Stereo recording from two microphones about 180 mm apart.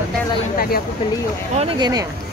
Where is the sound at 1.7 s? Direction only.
25° right (ahead or behind).